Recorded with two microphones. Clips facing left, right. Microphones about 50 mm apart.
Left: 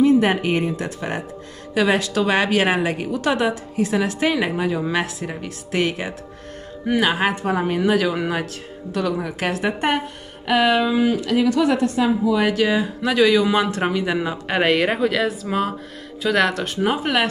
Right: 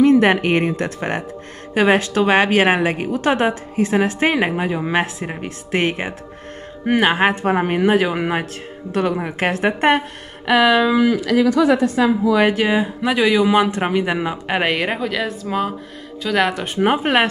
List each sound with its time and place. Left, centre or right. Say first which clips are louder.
0.0 s speech: right 3 dB; right
1.7 s a woman's voice: right 3 dB; right
10.5 s speech: right 3 dB; right
12.5 s speech: right 1 dB; right
14.6 s speech: left 4 dB; centre
16.3 s speech: right 2 dB; centre
16.8 s a woman's voice: right 4 dB; right